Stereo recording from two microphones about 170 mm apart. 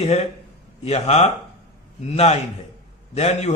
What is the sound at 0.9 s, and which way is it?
Speech, 40° left (ahead or behind).